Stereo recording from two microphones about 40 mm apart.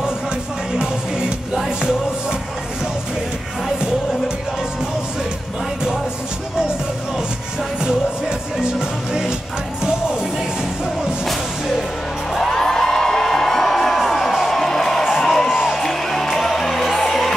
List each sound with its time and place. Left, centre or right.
7.8 s music: centre
12.4 s music: centre
15.0 s music: centre
15.7 s music: centre